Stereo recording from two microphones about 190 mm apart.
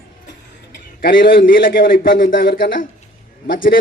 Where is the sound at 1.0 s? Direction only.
50° left (ahead or behind).